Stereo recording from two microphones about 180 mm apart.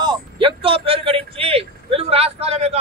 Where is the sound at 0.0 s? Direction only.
25° right (ahead or behind).